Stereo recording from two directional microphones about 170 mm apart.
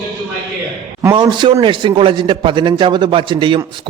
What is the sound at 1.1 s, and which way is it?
A man's voice, 25° right (ahead or behind).